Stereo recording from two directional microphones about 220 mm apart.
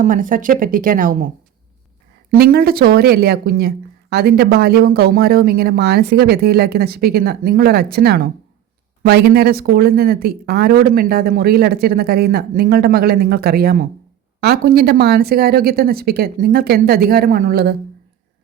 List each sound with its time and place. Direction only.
0.0 s speech: 35° right (ahead or behind)
2.4 s speech: 45° right (ahead or behind)